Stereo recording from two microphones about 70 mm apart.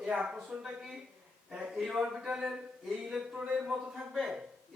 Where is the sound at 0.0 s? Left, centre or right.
Centre.